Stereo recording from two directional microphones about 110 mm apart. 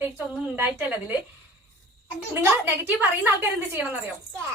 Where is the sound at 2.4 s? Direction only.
15° right (ahead or behind).